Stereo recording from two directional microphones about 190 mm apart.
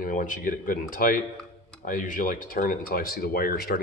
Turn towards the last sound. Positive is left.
turn(degrees=50)  # may be behind; listen again after turning